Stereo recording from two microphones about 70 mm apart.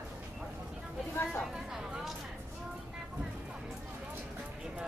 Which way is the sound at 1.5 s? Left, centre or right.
Centre.